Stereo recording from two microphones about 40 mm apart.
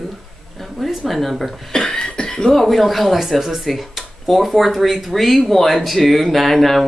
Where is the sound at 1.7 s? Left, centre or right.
Centre.